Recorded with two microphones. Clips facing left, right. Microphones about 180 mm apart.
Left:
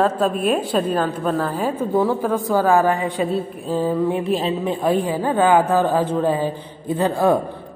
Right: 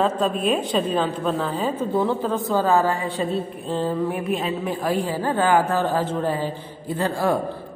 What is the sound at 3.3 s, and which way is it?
Speech, 5° left (ahead or behind).